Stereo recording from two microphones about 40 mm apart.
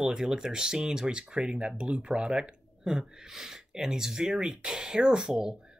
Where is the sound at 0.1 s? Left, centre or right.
Centre.